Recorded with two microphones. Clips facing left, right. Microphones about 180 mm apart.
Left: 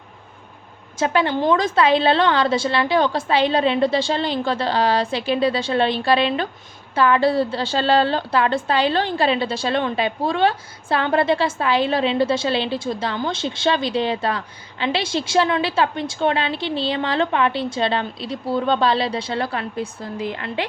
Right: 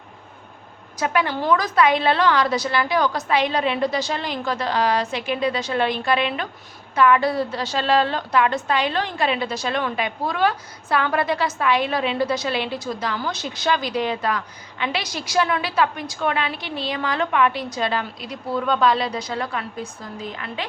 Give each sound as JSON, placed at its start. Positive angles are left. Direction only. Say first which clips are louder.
{"t": 0.9, "sound": "a woman's voice", "louder": "left 3 dB", "side_deg": 30}